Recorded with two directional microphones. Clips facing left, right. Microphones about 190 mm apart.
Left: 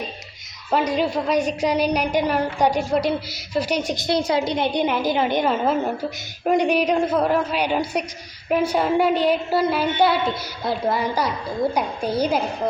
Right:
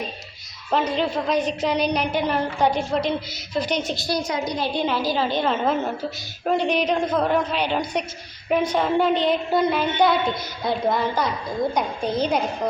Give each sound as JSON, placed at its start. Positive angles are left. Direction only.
{"t": 0.7, "sound": "a woman's voice", "side_deg": 10}
{"t": 4.2, "sound": "a woman's voice", "side_deg": 30}